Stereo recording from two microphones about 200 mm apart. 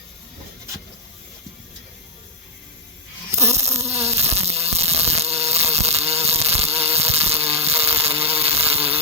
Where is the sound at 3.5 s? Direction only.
30° right (ahead or behind).